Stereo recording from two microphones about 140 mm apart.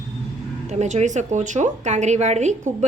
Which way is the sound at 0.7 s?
55° right (ahead or behind).